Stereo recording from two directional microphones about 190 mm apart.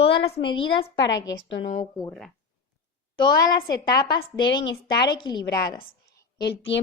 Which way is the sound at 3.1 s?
20° left (ahead or behind).